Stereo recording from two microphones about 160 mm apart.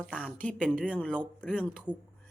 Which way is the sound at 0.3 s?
5° left (ahead or behind).